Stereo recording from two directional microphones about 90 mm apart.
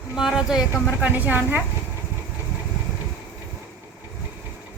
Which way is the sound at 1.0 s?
20° right (ahead or behind).